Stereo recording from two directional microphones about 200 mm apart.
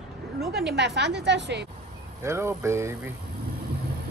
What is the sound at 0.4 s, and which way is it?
A woman's voice, 55° right (ahead or behind).